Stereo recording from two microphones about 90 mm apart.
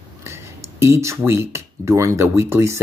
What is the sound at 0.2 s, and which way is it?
Speech, 30° right (ahead or behind).